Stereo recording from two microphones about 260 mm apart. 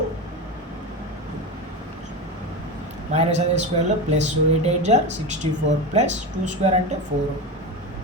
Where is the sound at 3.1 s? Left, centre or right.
Right.